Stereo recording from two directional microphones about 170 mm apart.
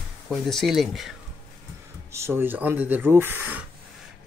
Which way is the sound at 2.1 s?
15° right (ahead or behind).